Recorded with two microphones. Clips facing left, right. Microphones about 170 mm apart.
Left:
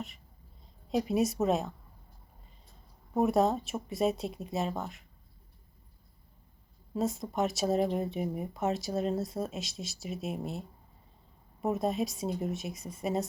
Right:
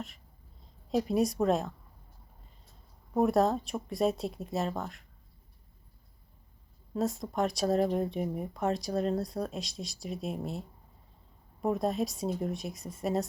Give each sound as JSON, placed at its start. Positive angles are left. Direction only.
{"t": 0.9, "sound": "speech", "side_deg": 0}
{"t": 3.2, "sound": "speech", "side_deg": 0}
{"t": 6.9, "sound": "speech", "side_deg": 0}
{"t": 11.6, "sound": "speech", "side_deg": 0}